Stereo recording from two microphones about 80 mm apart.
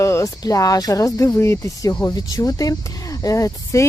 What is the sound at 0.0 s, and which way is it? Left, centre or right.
Speech, left.